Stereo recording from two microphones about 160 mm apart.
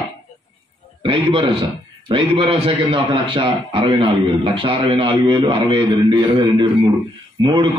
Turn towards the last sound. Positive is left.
turn(degrees=-30)  # may be behind; listen again after turning